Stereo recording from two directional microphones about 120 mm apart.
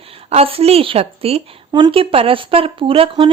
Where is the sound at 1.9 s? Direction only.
50° right (ahead or behind).